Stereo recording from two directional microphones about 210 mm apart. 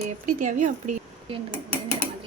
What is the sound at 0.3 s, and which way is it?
Speech, 35° right (ahead or behind).